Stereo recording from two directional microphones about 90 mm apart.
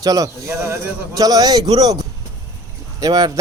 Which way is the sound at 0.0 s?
40° right (ahead or behind).